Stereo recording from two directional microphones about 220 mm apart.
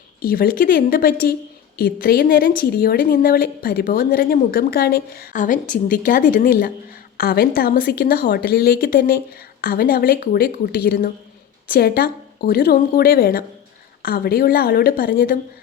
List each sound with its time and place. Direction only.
0.2 s a woman's voice: 45° left (ahead or behind)